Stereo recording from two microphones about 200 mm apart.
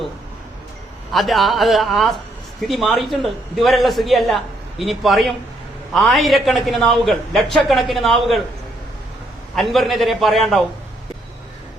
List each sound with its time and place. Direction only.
1.1 s a man's voice: centre (ahead or behind)
9.6 s a man's voice: centre (ahead or behind)